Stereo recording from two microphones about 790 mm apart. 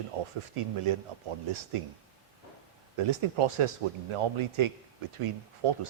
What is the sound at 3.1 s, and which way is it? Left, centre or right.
A man's voice, right.